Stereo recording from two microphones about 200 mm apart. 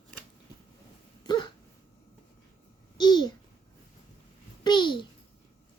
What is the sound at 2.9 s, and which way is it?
Babbling, 20° left (ahead or behind).